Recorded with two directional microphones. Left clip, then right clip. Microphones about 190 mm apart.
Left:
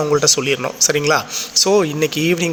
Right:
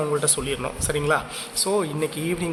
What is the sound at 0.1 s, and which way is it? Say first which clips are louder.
A man's voice: left 9 dB; 20° left (ahead or behind).